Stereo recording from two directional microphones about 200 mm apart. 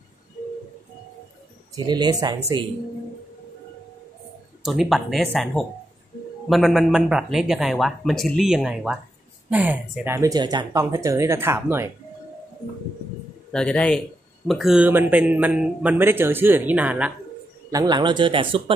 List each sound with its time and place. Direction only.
1.9 s a man's voice: 20° right (ahead or behind)
4.6 s a man's voice: centre (ahead or behind)
13.5 s a man's voice: 5° left (ahead or behind)
17.6 s a man's voice: 20° right (ahead or behind)